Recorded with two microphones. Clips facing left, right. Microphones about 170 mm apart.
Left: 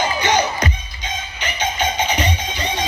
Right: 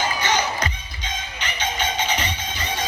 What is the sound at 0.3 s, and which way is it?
Music, 15° left (ahead or behind).